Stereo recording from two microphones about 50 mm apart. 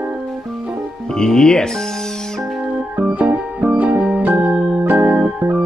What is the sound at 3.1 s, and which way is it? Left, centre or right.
Music, right.